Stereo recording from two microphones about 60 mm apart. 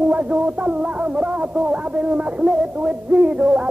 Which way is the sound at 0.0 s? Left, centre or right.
Right.